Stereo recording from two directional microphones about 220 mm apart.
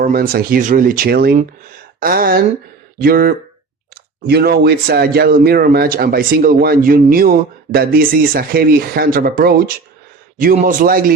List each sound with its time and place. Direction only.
0.0 s a man's voice: 45° right (ahead or behind)